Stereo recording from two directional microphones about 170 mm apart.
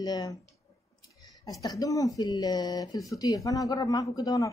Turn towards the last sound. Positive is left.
turn(degrees=20)  # may be behind; listen again after turning